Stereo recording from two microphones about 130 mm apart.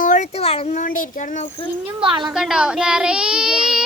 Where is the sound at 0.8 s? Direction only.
90° left.